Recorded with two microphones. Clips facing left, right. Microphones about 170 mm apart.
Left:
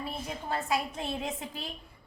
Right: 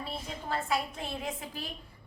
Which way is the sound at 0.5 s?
20° left (ahead or behind).